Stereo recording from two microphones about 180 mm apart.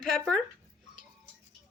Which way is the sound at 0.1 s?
Centre (ahead or behind).